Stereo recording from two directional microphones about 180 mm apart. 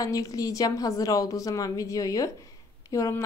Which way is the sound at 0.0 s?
20° left (ahead or behind).